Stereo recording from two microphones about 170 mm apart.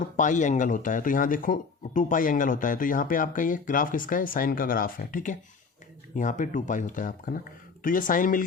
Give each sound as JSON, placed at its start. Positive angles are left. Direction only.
{"t": 0.0, "sound": "speech", "side_deg": 45}